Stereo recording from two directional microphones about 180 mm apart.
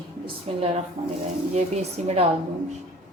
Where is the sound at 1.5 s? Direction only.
40° right (ahead or behind).